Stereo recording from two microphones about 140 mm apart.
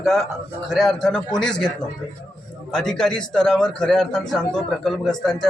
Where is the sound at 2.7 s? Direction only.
5° left (ahead or behind).